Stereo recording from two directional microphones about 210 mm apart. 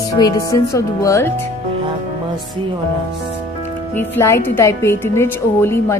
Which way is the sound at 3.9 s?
10° left (ahead or behind).